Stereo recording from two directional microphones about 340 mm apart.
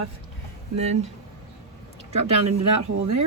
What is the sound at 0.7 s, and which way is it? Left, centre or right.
Speech, centre.